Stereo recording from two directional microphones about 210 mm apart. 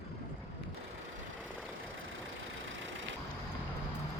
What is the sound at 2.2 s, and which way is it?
Vehicle, 65° right (ahead or behind).